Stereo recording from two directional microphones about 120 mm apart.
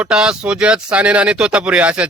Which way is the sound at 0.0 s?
5° right (ahead or behind).